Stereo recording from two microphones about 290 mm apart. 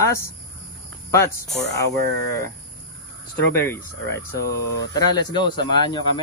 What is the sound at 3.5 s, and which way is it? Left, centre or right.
Speech, centre.